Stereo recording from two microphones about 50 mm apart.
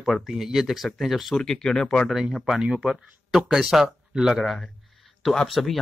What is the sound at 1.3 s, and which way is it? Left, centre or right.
Speech, centre.